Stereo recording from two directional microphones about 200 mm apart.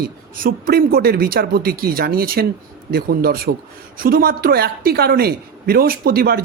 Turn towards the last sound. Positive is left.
turn(degrees=-50)  # may be behind; listen again after turning